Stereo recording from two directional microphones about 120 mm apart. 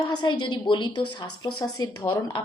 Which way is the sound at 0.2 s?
40° left (ahead or behind).